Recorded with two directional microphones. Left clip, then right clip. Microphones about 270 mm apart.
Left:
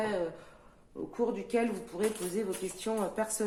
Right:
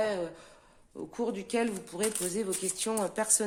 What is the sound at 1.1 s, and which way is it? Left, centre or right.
Speech, right.